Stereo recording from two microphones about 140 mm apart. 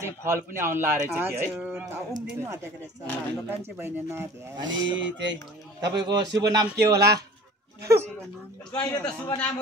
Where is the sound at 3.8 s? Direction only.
15° right (ahead or behind).